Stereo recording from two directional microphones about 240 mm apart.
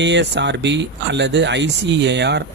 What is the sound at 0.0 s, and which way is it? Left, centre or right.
Speech, right.